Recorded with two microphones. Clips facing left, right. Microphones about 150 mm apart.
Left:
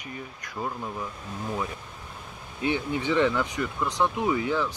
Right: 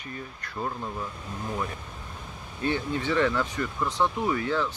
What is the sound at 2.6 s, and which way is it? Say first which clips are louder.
Speech: left 1 dB; 15° left (ahead or behind).